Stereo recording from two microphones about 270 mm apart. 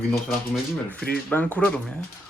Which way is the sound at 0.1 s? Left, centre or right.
Centre.